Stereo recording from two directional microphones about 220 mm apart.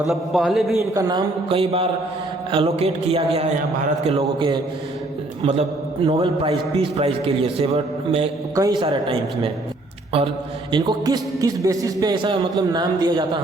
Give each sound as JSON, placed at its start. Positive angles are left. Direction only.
{"t": 0.1, "sound": "a man's voice", "side_deg": 0}
{"t": 0.9, "sound": "a man's voice", "side_deg": -20}
{"t": 8.5, "sound": "a man's voice", "side_deg": -15}
{"t": 10.7, "sound": "a man's voice", "side_deg": -20}